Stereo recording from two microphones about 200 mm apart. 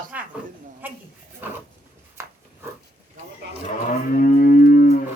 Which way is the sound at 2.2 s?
15° right (ahead or behind).